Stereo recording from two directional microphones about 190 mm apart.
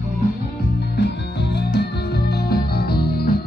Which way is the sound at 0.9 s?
60° left (ahead or behind).